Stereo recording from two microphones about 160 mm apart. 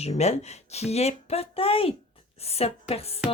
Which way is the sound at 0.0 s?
40° left (ahead or behind).